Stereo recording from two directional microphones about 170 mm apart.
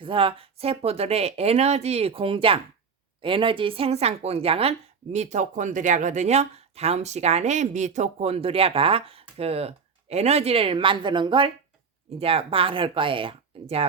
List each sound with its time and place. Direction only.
0.0 s speech: 30° right (ahead or behind)